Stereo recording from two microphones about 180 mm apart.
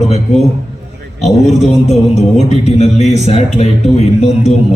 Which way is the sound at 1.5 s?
40° left (ahead or behind).